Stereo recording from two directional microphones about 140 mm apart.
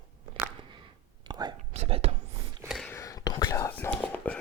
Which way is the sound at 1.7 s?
45° right (ahead or behind).